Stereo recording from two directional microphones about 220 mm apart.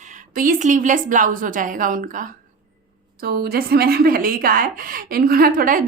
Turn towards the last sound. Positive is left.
turn(degrees=-40)  # may be behind; listen again after turning